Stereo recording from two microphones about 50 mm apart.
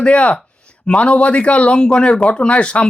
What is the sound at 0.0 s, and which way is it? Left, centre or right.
Speech, left.